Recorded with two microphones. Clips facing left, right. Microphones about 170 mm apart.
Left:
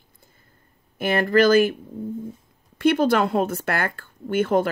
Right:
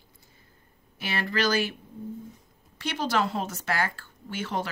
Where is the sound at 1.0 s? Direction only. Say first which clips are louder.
Left 11 dB; 50° left (ahead or behind).